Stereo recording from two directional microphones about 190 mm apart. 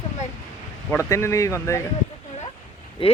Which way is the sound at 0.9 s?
15° left (ahead or behind).